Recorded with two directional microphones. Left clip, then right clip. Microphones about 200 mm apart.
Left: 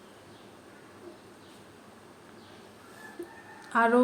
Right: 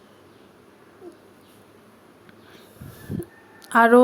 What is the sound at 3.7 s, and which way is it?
Speech, 45° right (ahead or behind).